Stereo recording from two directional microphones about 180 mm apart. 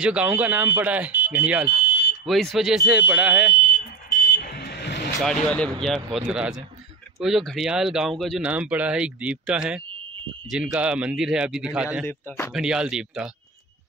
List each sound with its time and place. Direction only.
0.0 s speech: 5° right (ahead or behind)
1.9 s smoke detector: 70° left (ahead or behind)
2.2 s speech: centre (ahead or behind)
4.4 s vehicle: 60° left (ahead or behind)
5.2 s speech: 5° left (ahead or behind)
12.1 s speech: 10° left (ahead or behind)
12.5 s speech: 5° right (ahead or behind)